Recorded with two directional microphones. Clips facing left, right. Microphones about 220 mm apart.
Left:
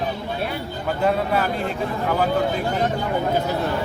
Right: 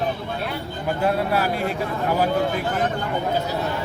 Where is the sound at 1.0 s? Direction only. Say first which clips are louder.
Left 1 dB; 5° right (ahead or behind).